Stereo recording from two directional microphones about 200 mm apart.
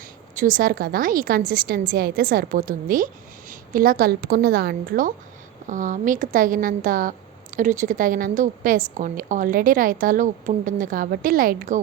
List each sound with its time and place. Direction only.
0.3 s a woman's voice: 40° right (ahead or behind)